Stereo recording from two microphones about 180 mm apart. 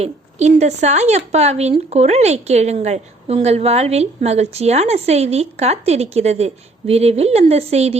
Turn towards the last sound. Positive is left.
turn(degrees=-35)  # may be behind; listen again after turning